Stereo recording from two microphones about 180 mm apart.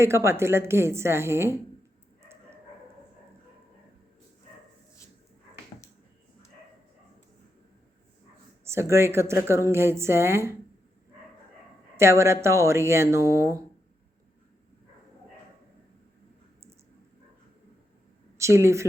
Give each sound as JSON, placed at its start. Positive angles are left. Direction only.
{"t": 0.0, "sound": "speech", "side_deg": -15}
{"t": 2.2, "sound": "dog", "side_deg": -15}
{"t": 8.6, "sound": "speech", "side_deg": -15}
{"t": 11.9, "sound": "speech", "side_deg": -15}
{"t": 18.3, "sound": "speech", "side_deg": -15}